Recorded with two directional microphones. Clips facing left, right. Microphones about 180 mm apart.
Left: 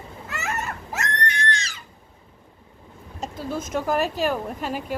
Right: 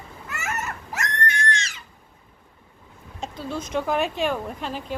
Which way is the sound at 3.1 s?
Centre (ahead or behind).